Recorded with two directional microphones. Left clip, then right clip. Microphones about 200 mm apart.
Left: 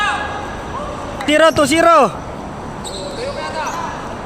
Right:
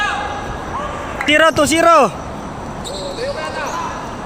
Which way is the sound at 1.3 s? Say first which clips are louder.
Even; centre (ahead or behind).